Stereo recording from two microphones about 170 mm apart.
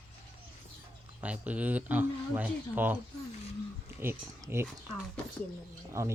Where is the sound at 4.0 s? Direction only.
15° right (ahead or behind).